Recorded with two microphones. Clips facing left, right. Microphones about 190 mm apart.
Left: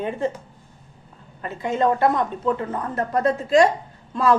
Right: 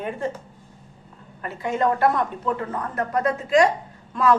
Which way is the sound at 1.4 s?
25° left (ahead or behind).